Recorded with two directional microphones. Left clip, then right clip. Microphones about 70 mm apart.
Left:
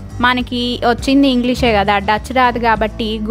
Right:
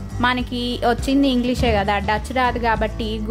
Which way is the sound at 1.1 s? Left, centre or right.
Left.